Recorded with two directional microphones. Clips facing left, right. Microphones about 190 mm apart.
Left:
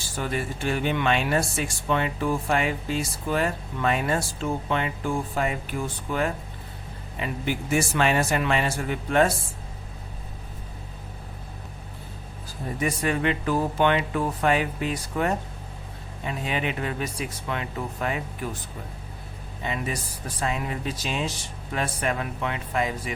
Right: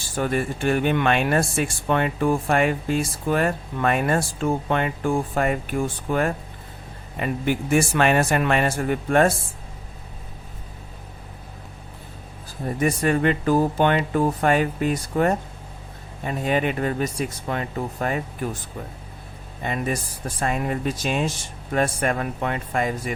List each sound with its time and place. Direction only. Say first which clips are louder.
0.2 s speech: right 5 dB; 50° right (ahead or behind)
12.8 s speech: right 5 dB; 45° right (ahead or behind)
19.6 s speech: right 4 dB; 50° right (ahead or behind)